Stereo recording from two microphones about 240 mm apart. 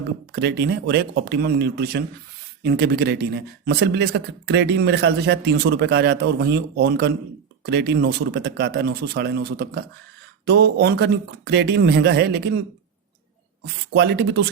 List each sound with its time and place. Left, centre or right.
0.3 s speech: right
13.9 s speech: right